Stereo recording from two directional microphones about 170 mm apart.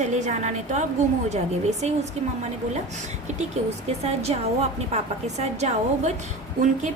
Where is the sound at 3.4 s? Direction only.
40° right (ahead or behind).